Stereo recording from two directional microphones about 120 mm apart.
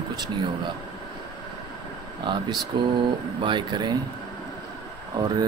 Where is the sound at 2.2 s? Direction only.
40° right (ahead or behind).